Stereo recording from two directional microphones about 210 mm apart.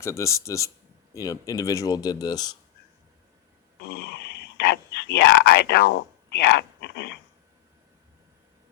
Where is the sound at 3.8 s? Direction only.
50° left (ahead or behind).